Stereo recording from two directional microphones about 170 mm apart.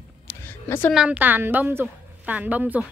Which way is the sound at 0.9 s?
5° right (ahead or behind).